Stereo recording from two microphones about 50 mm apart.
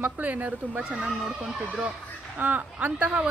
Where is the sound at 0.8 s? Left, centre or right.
Centre.